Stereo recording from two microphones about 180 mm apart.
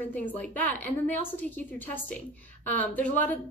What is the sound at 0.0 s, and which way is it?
A woman's voice, 10° left (ahead or behind).